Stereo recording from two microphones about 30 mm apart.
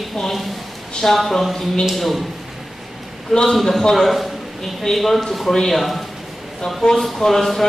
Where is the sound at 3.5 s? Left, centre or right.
Centre.